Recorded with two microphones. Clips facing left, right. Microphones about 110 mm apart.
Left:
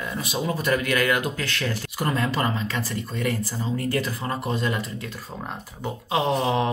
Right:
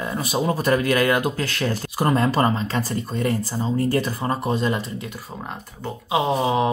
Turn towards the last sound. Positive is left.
turn(degrees=-15)  # may be behind; listen again after turning